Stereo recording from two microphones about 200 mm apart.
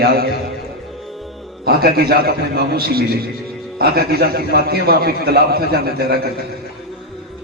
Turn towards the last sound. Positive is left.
turn(degrees=-50)  # may be behind; listen again after turning